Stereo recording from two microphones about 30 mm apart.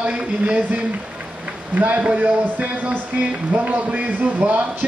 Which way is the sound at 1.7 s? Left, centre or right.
Right.